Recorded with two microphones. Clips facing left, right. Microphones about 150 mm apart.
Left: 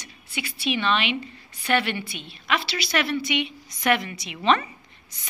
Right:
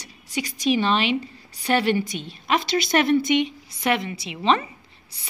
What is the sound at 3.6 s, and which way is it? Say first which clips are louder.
A woman's voice: even; 30° right (ahead or behind).